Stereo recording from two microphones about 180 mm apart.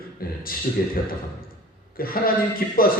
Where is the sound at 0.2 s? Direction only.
55° left (ahead or behind).